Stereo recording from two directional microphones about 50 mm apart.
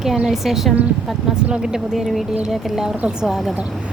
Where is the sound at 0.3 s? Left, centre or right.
Centre.